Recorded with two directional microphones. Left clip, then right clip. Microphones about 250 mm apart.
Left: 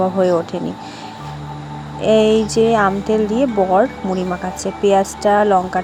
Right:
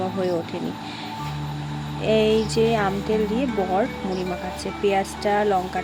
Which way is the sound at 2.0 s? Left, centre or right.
Centre.